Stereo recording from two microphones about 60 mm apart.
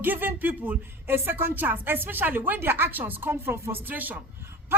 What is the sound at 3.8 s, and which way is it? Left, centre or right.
Speech, right.